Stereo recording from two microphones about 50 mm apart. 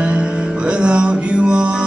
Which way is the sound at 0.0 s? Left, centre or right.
Right.